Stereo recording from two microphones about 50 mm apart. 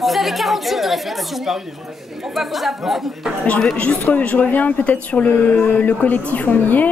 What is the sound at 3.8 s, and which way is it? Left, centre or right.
Speech, left.